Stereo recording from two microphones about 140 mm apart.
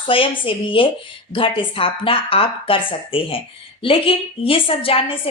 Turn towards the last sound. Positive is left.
turn(degrees=40)  # may be behind; listen again after turning